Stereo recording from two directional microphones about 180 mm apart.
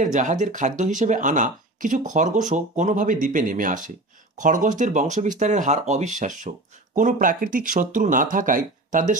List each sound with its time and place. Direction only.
0.0 s speech: 45° right (ahead or behind)